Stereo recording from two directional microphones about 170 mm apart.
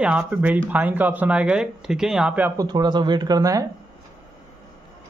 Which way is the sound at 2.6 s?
25° right (ahead or behind).